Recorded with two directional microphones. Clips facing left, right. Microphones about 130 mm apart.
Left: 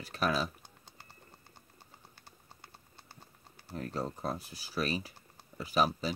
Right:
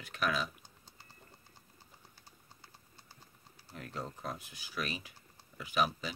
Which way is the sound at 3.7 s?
35° left (ahead or behind).